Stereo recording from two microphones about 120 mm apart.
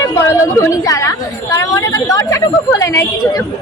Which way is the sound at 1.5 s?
25° left (ahead or behind).